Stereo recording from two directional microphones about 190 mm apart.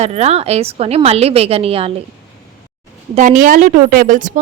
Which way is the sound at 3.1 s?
45° right (ahead or behind).